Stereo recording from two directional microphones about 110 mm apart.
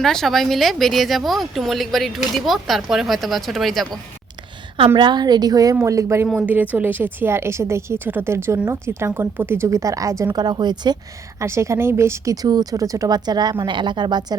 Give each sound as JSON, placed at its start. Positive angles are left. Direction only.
{"t": 0.0, "sound": "speech", "side_deg": 5}
{"t": 4.9, "sound": "a woman's voice", "side_deg": -40}
{"t": 6.3, "sound": "a woman's voice", "side_deg": -15}
{"t": 11.3, "sound": "speech", "side_deg": -25}